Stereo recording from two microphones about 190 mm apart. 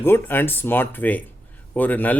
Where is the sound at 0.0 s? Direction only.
10° left (ahead or behind).